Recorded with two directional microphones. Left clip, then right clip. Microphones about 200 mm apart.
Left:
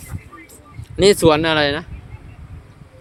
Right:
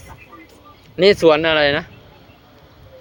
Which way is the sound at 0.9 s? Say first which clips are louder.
Right 1 dB; 20° left (ahead or behind).